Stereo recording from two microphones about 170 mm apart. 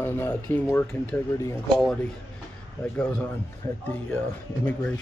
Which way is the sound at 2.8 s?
10° left (ahead or behind).